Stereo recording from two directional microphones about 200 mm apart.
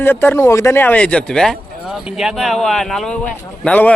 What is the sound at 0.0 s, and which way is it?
A man's voice, 10° left (ahead or behind).